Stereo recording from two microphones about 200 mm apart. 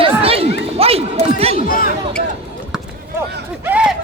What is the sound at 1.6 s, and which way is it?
Speech, 45° left (ahead or behind).